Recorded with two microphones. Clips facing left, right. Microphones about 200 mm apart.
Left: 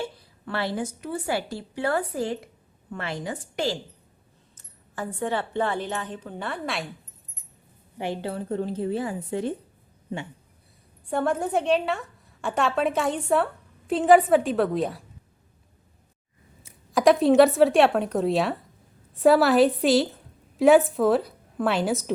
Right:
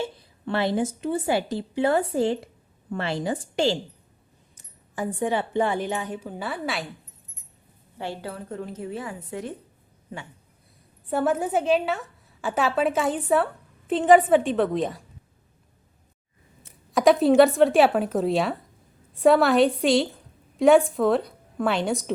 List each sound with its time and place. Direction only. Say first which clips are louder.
0.0 s a woman's voice: right 2 dB; 20° right (ahead or behind)
4.5 s a woman's voice: right 3 dB; 15° right (ahead or behind)
7.9 s speech: left 3 dB; 20° left (ahead or behind)
11.1 s a woman's voice: right 1 dB; 5° right (ahead or behind)
16.6 s a woman's voice: even; centre (ahead or behind)